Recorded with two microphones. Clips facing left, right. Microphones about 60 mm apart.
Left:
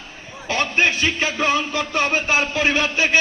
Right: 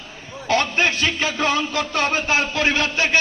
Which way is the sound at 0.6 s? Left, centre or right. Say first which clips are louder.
Left 1 dB; left.